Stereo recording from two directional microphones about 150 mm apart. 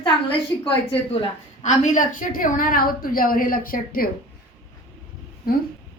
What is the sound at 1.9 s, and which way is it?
A woman's voice, 65° left (ahead or behind).